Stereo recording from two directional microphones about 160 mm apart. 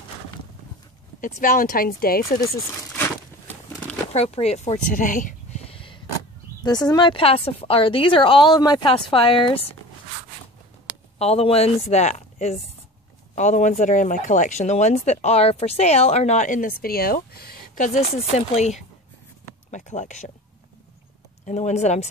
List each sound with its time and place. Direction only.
1.2 s speech: 55° left (ahead or behind)
2.4 s crumpling: 15° left (ahead or behind)
4.1 s speech: 40° left (ahead or behind); by 5.3 s 55° left (ahead or behind)
5.7 s a sound: 35° left (ahead or behind)
6.6 s a woman's voice: 25° left (ahead or behind)
11.1 s a woman's voice: 40° left (ahead or behind)
19.7 s speech: 50° left (ahead or behind)
21.5 s speech: 45° left (ahead or behind)